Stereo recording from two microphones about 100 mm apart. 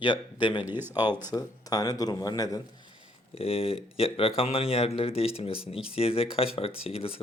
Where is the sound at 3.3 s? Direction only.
70° left (ahead or behind).